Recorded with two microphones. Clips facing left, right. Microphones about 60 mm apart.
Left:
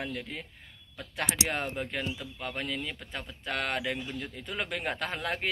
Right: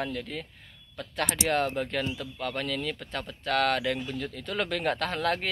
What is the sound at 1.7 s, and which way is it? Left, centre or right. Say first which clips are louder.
Speech: right 4 dB; centre.